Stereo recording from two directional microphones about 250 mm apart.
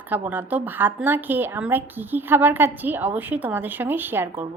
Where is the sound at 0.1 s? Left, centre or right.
Centre.